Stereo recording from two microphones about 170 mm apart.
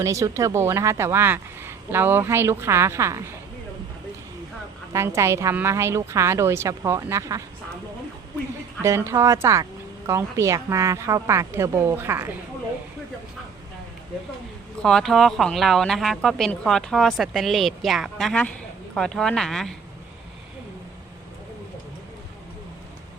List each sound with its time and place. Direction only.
0.0 s a woman's voice: 20° right (ahead or behind)
4.9 s a woman's voice: 15° right (ahead or behind)
8.8 s a woman's voice: 15° right (ahead or behind)
14.8 s speech: 5° left (ahead or behind)